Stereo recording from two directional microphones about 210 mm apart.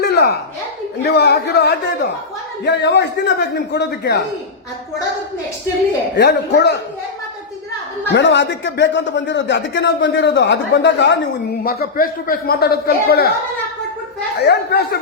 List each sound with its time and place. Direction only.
0.0 s a sound: 50° left (ahead or behind)
1.0 s a man's voice: 50° left (ahead or behind)
6.1 s a man's voice: 50° left (ahead or behind)
8.1 s speech: 55° left (ahead or behind)
11.6 s a man's voice: 45° left (ahead or behind)
14.3 s a man's voice: 50° left (ahead or behind)